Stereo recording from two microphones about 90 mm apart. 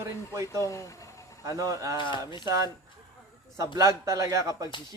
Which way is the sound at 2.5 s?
40° right (ahead or behind).